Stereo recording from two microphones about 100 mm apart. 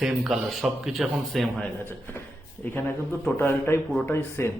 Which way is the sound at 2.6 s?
20° left (ahead or behind).